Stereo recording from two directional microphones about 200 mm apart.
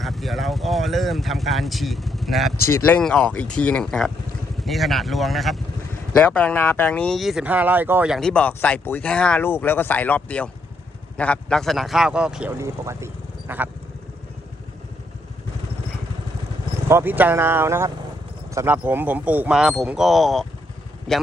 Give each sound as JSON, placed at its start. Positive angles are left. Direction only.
{"t": 0.0, "sound": "speech", "side_deg": 0}
{"t": 2.6, "sound": "speech", "side_deg": 15}
{"t": 16.9, "sound": "speech", "side_deg": -10}